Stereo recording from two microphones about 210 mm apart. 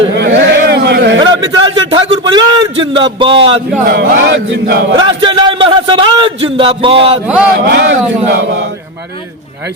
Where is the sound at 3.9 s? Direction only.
50° right (ahead or behind).